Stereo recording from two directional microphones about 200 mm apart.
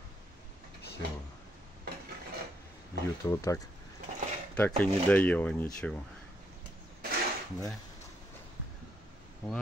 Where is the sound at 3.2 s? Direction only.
15° left (ahead or behind).